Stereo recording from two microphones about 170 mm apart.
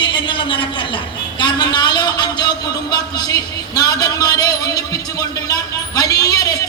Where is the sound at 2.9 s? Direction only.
25° left (ahead or behind).